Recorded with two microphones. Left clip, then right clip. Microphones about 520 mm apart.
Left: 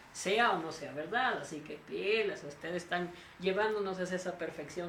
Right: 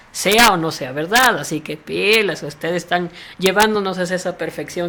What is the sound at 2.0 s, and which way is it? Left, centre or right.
Speech, right.